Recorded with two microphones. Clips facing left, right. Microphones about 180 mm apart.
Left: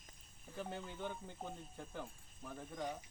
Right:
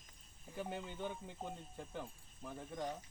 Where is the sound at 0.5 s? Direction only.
5° right (ahead or behind).